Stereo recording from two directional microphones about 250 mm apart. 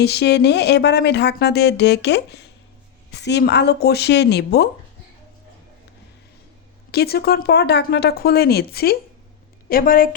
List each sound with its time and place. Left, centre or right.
0.0 s speech: left
6.9 s speech: left